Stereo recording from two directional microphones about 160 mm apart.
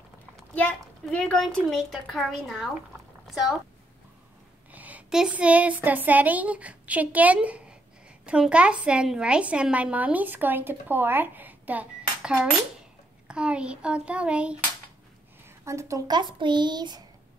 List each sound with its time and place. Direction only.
0.6 s a woman's voice: 5° left (ahead or behind)
4.7 s a woman's voice: 10° right (ahead or behind)
13.3 s a woman's voice: 5° right (ahead or behind)
15.4 s speech: 20° right (ahead or behind)